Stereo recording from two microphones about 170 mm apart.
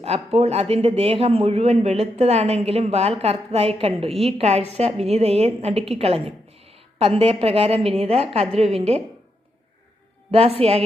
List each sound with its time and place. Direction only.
0.3 s speech: 35° right (ahead or behind)
10.3 s speech: 35° right (ahead or behind)